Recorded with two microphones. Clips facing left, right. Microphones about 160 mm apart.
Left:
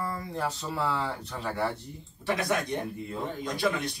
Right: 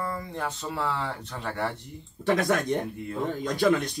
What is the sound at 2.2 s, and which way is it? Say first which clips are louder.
Speech: right 6 dB; 45° right (ahead or behind).